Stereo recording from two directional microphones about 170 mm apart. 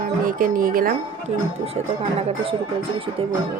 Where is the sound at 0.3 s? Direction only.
55° right (ahead or behind).